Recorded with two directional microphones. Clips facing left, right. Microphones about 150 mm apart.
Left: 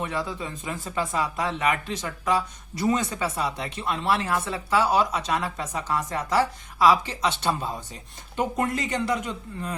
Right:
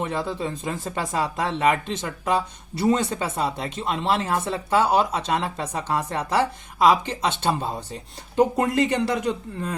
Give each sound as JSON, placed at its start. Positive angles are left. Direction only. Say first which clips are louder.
{"t": 0.0, "sound": "speech", "louder": "right 3 dB", "side_deg": -25}
{"t": 7.6, "sound": "speech", "louder": "right 3 dB", "side_deg": -30}